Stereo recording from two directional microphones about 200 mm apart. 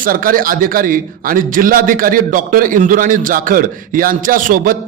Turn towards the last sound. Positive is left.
turn(degrees=-45)  # may be behind; listen again after turning